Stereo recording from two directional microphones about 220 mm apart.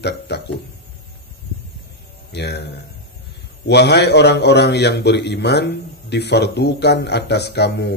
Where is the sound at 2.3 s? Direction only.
50° left (ahead or behind).